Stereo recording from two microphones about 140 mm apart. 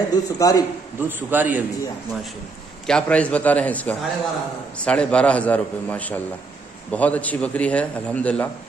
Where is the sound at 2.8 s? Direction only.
5° left (ahead or behind).